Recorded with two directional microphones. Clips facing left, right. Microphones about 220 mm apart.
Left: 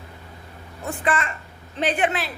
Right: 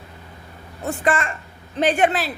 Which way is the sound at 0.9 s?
45° right (ahead or behind).